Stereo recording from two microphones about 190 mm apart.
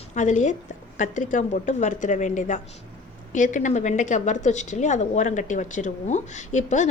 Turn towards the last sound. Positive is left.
turn(degrees=40)  # may be behind; listen again after turning